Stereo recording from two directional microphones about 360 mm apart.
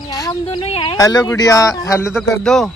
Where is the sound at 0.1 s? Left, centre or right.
Centre.